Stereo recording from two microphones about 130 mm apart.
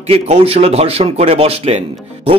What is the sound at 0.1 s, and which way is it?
A man's voice, 50° right (ahead or behind).